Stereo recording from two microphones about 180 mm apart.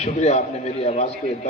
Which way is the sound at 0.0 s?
40° left (ahead or behind).